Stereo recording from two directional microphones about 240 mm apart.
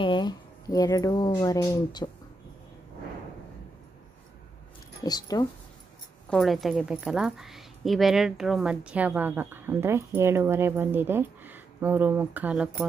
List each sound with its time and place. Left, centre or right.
0.0 s speech: centre
5.0 s speech: centre
6.2 s a woman's voice: centre